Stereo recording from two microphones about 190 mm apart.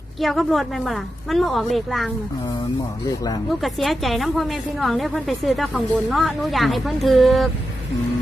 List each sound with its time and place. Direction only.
0.2 s a woman's voice: centre (ahead or behind)
3.1 s speech: 20° left (ahead or behind)
3.5 s a woman's voice: centre (ahead or behind)